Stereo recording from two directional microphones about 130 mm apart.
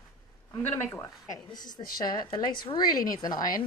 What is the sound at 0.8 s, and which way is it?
Speech, 15° left (ahead or behind).